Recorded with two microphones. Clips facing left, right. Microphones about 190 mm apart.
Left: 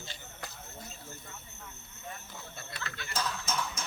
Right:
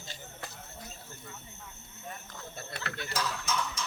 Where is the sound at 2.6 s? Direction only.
60° right (ahead or behind).